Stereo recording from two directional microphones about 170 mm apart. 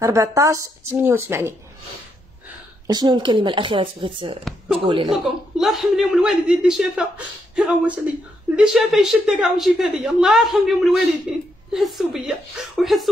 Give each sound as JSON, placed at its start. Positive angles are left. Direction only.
{"t": 0.0, "sound": "a woman's voice", "side_deg": -15}
{"t": 2.9, "sound": "a woman's voice", "side_deg": -25}
{"t": 5.1, "sound": "a woman's voice", "side_deg": 0}